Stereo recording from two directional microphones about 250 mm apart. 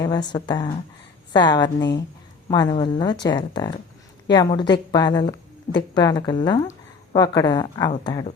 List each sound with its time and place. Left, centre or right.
0.0 s a woman's voice: centre